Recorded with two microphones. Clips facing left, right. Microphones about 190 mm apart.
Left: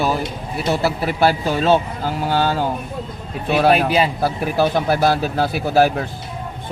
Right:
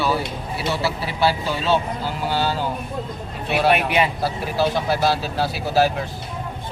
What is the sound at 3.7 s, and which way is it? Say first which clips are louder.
Speech: left 3 dB; 30° left (ahead or behind).